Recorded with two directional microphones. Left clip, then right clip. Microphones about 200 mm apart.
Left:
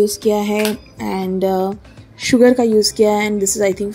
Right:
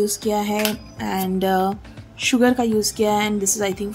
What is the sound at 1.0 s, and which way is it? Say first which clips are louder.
Music: left 3 dB; 10° left (ahead or behind).